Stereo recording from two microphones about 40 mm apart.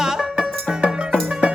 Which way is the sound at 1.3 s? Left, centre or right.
Right.